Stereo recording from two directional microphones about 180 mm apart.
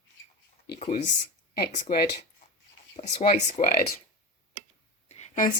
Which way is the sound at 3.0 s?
35° left (ahead or behind).